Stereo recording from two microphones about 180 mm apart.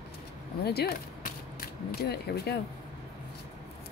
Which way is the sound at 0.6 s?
60° left (ahead or behind).